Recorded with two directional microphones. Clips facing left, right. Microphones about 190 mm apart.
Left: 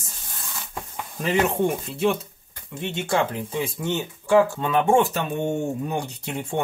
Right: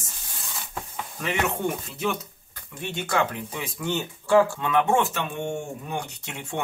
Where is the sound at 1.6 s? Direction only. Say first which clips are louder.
Left 6 dB; 30° left (ahead or behind).